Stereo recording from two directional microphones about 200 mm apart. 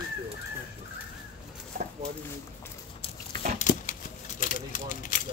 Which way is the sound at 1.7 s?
40° right (ahead or behind).